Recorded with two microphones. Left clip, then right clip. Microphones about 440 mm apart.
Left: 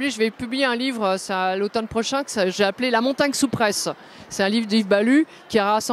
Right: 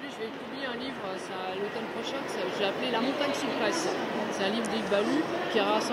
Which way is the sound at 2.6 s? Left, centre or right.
Left.